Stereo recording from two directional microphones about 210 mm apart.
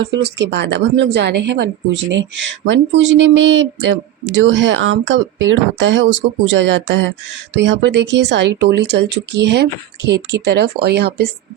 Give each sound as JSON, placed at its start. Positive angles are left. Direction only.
{"t": 0.0, "sound": "a woman's voice", "side_deg": -55}